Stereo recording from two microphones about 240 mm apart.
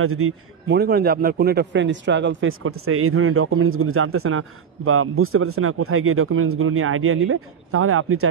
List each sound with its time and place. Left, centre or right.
0.0 s a man's voice: right
0.7 s a man's voice: right